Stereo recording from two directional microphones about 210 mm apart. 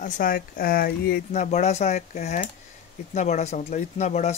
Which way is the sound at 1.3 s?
35° left (ahead or behind).